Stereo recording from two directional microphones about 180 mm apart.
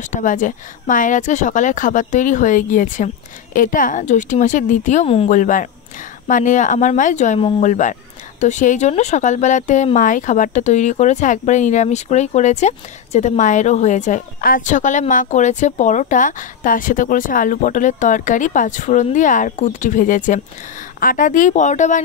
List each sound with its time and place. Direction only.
0.1 s speech: 45° left (ahead or behind)
5.3 s speech: 45° left (ahead or behind)